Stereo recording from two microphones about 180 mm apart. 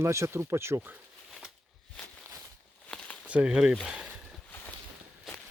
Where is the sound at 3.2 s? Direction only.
5° right (ahead or behind).